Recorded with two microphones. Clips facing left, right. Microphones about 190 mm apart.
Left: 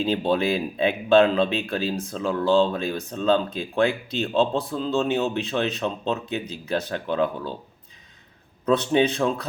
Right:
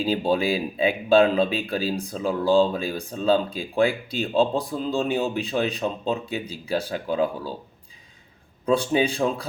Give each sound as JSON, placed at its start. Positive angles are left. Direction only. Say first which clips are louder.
{"t": 0.0, "sound": "speech", "louder": "even", "side_deg": -10}
{"t": 8.6, "sound": "speech", "louder": "left 1 dB", "side_deg": -10}